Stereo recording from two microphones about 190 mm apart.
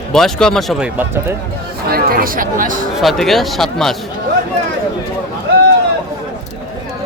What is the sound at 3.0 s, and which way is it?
Speech, centre (ahead or behind).